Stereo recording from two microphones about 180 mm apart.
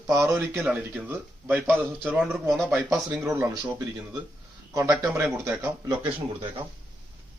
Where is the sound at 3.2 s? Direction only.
15° right (ahead or behind).